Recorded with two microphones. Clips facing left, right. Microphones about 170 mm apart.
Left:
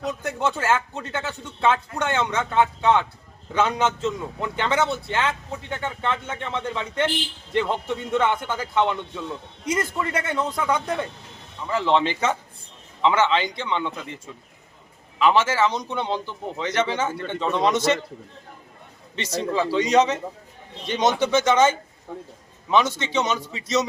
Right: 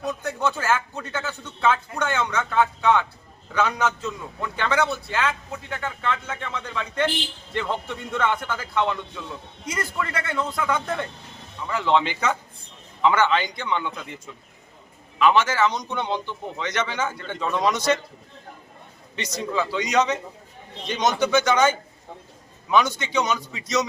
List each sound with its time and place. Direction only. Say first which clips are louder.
0.2 s a man's voice: left 1 dB; 20° left (ahead or behind)
11.9 s a man's voice: left 1 dB; 30° left (ahead or behind)
15.2 s a man's voice: even; 30° left (ahead or behind)
19.1 s a man's voice: left 2 dB; 30° left (ahead or behind)